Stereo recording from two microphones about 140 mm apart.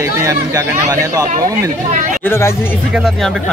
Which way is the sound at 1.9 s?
70° right (ahead or behind).